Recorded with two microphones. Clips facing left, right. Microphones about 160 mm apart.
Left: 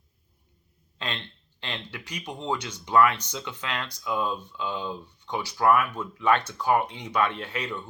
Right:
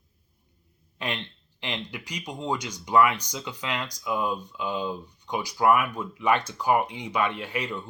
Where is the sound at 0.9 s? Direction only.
10° right (ahead or behind).